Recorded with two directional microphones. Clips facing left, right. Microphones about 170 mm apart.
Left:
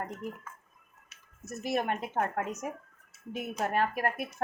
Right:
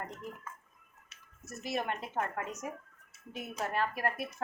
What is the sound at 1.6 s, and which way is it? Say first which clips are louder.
Speech: left 5 dB; 50° left (ahead or behind).